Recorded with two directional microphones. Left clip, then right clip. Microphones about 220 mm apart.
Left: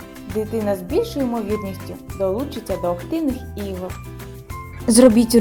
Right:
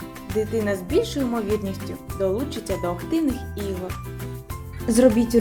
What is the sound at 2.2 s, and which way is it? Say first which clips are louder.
Speech: left 2 dB; 5° right (ahead or behind).